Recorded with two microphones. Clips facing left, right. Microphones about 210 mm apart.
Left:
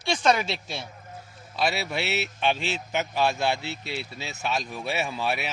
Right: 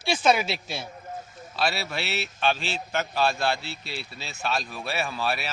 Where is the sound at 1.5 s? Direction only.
20° left (ahead or behind).